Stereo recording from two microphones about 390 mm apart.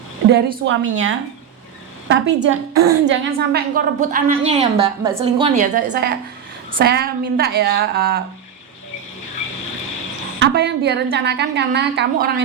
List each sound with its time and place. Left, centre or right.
0.3 s a woman's voice: right
10.4 s a woman's voice: right